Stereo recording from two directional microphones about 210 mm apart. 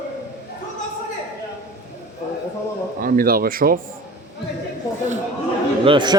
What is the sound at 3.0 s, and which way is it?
Speech, 45° right (ahead or behind).